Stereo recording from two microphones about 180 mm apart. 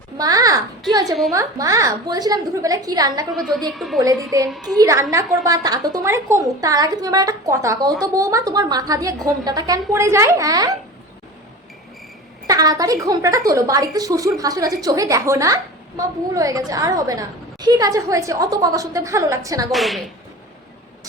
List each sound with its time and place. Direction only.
0.2 s a sound: 20° right (ahead or behind)
1.3 s a woman's voice: 20° right (ahead or behind)
3.3 s a woman's voice: centre (ahead or behind)
4.0 s a woman's voice: 20° right (ahead or behind)
12.5 s a woman's voice: 20° right (ahead or behind)
19.7 s a woman's voice: centre (ahead or behind)